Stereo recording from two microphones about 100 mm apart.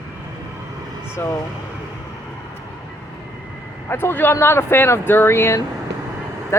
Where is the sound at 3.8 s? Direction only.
20° left (ahead or behind).